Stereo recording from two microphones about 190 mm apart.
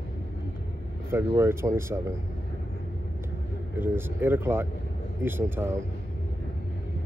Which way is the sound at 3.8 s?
10° right (ahead or behind).